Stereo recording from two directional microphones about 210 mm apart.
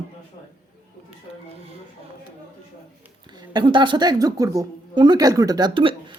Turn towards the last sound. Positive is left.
turn(degrees=-25)  # may be behind; listen again after turning